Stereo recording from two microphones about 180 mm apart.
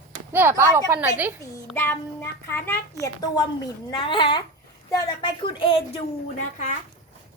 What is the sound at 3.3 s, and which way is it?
A woman's voice, 25° left (ahead or behind).